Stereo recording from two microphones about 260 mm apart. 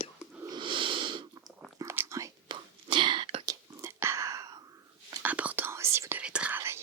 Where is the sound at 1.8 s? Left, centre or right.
Centre.